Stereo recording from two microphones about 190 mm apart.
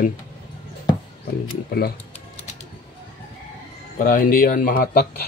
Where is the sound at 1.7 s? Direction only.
55° left (ahead or behind).